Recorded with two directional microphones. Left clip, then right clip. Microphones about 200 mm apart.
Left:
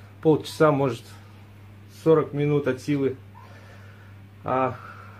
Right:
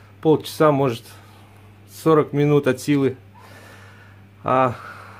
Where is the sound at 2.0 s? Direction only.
45° right (ahead or behind).